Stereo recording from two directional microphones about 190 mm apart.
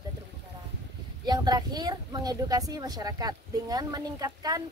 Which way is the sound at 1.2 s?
20° right (ahead or behind).